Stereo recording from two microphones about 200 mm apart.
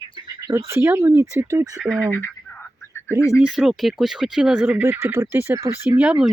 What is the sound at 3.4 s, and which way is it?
Speech, centre (ahead or behind).